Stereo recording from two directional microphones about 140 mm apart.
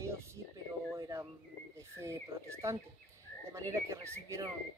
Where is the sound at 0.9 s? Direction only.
25° right (ahead or behind).